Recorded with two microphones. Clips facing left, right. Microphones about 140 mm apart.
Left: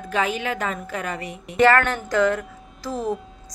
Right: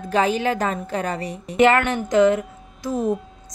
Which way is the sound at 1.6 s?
20° right (ahead or behind).